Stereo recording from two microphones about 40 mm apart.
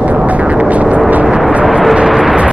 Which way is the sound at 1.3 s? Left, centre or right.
Centre.